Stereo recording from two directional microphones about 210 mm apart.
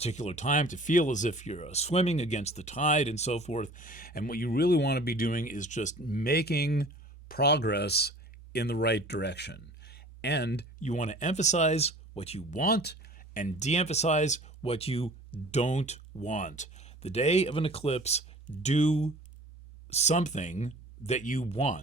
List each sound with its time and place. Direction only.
0.0 s speech: 30° left (ahead or behind); by 10.7 s 55° left (ahead or behind)
10.8 s speech: 35° left (ahead or behind)